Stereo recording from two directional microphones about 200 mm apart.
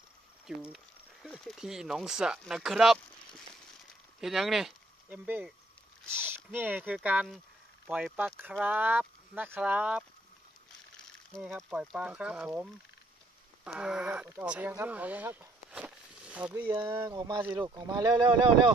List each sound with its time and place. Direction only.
0.5 s speech: 5° right (ahead or behind)
4.2 s speech: centre (ahead or behind)
11.3 s speech: centre (ahead or behind)
13.7 s speech: 5° right (ahead or behind)
16.6 s speech: 20° right (ahead or behind)